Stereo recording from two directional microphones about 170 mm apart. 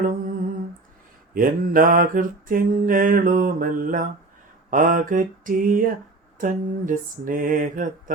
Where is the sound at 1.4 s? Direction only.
55° right (ahead or behind).